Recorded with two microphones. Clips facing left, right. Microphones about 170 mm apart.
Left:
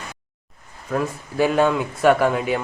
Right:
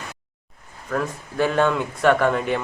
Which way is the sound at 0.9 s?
10° left (ahead or behind).